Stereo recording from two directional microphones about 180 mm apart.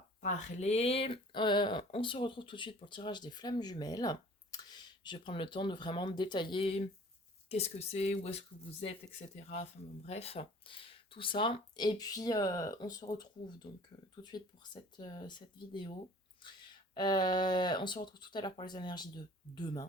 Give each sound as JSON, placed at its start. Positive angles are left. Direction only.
{"t": 0.2, "sound": "speech", "side_deg": 40}